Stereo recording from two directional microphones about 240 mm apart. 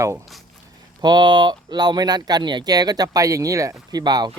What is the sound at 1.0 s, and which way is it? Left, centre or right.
Speech, centre.